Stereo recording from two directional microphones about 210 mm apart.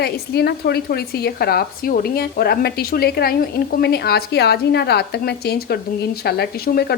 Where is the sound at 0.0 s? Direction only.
50° left (ahead or behind).